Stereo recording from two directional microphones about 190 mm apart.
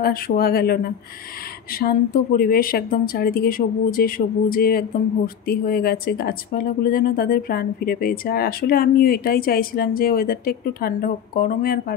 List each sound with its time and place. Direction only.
0.0 s a woman's voice: 50° left (ahead or behind)